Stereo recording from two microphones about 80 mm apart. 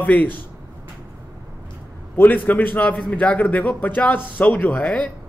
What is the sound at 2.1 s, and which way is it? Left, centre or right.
A man's voice, left.